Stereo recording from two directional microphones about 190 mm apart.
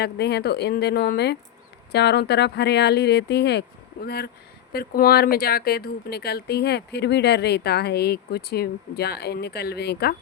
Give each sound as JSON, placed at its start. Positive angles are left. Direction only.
{"t": 0.0, "sound": "speech", "side_deg": 60}